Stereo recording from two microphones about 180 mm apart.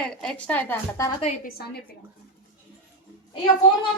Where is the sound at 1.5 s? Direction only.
60° left (ahead or behind).